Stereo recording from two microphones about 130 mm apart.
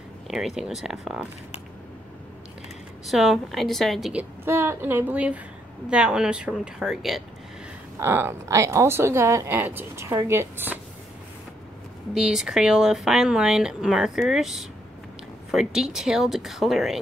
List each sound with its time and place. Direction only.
0.3 s speech: 5° right (ahead or behind)
3.1 s speech: centre (ahead or behind)
4.1 s speech: 15° right (ahead or behind)
8.0 s speech: 20° right (ahead or behind)
12.1 s speech: 5° right (ahead or behind)